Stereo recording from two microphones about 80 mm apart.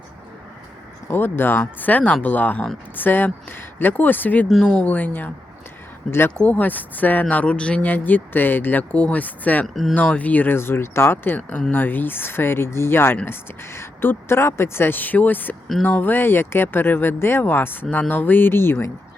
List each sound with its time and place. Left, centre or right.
1.0 s speech: left
4.4 s speech: centre
4.8 s speech: left
9.6 s speech: centre
9.9 s speech: centre